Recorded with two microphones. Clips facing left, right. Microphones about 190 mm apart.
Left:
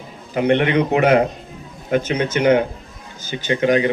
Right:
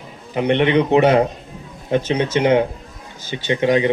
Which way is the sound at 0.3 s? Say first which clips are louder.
Even; 25° right (ahead or behind).